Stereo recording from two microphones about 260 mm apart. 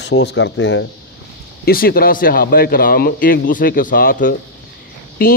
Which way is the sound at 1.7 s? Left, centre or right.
Left.